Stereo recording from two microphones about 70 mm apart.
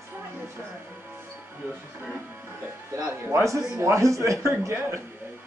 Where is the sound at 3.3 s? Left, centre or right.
Right.